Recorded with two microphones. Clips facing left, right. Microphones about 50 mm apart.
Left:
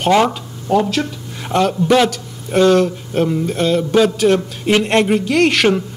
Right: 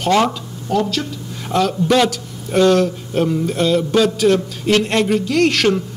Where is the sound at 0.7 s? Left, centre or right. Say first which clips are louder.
Left 3 dB; left.